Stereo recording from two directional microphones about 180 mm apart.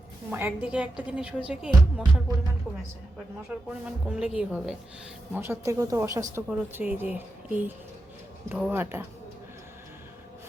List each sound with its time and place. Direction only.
0.3 s speech: 10° right (ahead or behind)
3.8 s speech: 5° right (ahead or behind)